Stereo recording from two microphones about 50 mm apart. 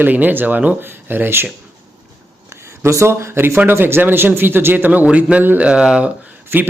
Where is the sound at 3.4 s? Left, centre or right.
Right.